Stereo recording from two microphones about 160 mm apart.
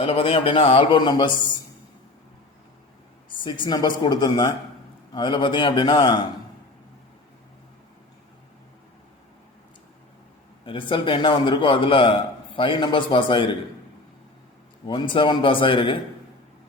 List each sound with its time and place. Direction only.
0.0 s a man's voice: 35° left (ahead or behind)
3.2 s speech: 30° left (ahead or behind)
10.7 s a man's voice: 30° left (ahead or behind)
14.8 s a man's voice: 30° left (ahead or behind)